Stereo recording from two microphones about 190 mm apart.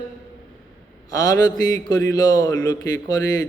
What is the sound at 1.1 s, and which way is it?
A man's voice, 20° left (ahead or behind).